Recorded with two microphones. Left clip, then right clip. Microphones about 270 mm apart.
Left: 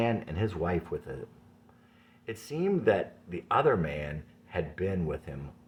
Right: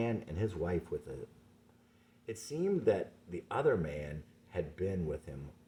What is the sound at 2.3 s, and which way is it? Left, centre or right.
Speech, left.